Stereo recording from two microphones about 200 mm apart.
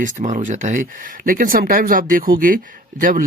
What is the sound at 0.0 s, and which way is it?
Speech, 40° right (ahead or behind).